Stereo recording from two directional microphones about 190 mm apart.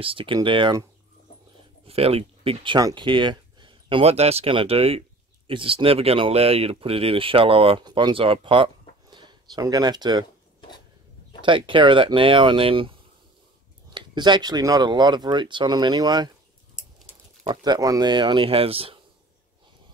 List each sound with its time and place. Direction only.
0.0 s speech: 30° right (ahead or behind)
1.9 s speech: 30° right (ahead or behind)
11.4 s speech: 25° right (ahead or behind)
13.9 s speech: 25° right (ahead or behind)
17.5 s speech: 20° right (ahead or behind)